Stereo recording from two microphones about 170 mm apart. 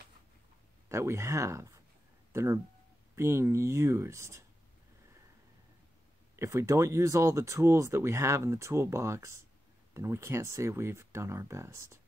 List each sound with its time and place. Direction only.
0.8 s speech: 15° right (ahead or behind)
6.3 s speech: 15° right (ahead or behind)